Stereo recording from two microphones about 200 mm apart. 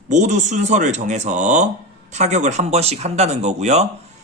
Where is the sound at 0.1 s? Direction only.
40° right (ahead or behind).